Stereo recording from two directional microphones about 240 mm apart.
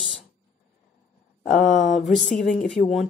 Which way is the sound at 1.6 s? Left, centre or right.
Left.